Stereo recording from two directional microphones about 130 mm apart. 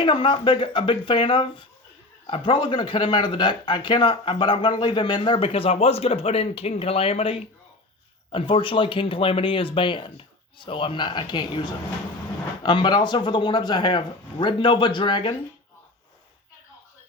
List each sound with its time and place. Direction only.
0.0 s speech: 40° left (ahead or behind)